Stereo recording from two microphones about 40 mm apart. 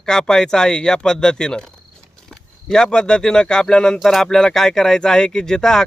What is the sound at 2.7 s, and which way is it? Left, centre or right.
Speech, centre.